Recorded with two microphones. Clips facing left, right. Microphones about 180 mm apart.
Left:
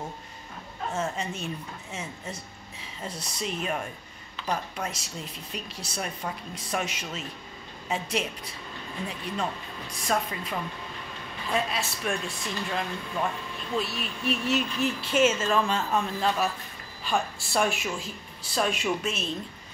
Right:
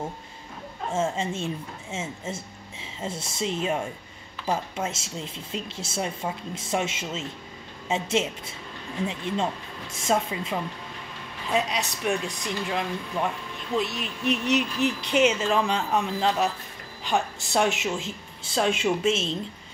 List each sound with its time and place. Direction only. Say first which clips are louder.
0.9 s speech: right 5 dB; 25° right (ahead or behind)